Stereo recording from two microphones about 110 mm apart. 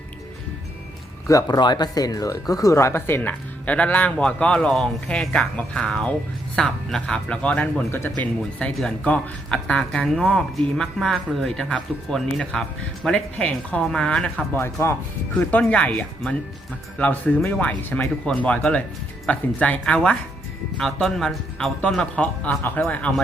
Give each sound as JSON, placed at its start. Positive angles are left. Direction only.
{"t": 1.3, "sound": "speech", "side_deg": 35}
{"t": 15.4, "sound": "speech", "side_deg": 10}